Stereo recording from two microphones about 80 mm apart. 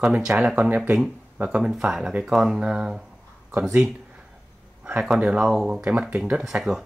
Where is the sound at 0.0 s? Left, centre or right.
Centre.